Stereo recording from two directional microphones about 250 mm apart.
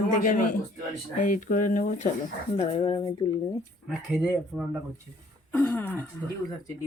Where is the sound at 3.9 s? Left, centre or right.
Centre.